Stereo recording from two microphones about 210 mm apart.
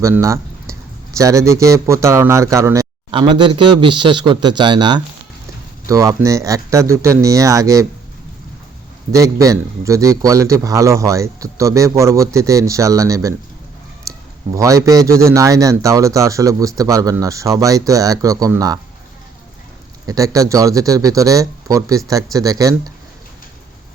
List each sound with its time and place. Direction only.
0.0 s a man's voice: 15° right (ahead or behind)
9.1 s a man's voice: 15° right (ahead or behind)
20.1 s a man's voice: 15° right (ahead or behind)